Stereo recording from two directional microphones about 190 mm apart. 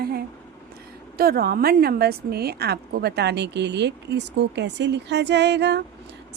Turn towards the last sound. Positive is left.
turn(degrees=-65)  # may be behind; listen again after turning